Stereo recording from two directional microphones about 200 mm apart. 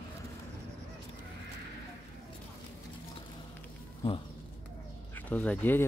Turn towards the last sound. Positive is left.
turn(degrees=10)  # may be behind; listen again after turning